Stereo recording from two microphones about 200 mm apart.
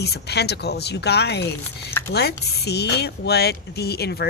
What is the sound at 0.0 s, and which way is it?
Speech, 55° left (ahead or behind).